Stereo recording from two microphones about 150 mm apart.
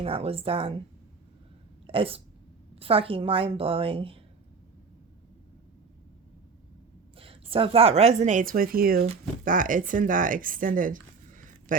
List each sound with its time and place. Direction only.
0.0 s a woman's voice: 40° right (ahead or behind)
1.9 s a woman's voice: 40° right (ahead or behind)
7.2 s speech: 40° right (ahead or behind); by 9.0 s 75° right (ahead or behind)
9.4 s speech: 65° right (ahead or behind)